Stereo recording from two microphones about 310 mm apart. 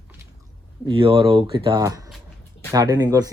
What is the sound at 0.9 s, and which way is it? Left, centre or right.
Speech, centre.